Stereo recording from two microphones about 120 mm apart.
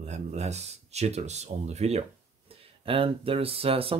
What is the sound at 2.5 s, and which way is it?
Speech, 50° right (ahead or behind).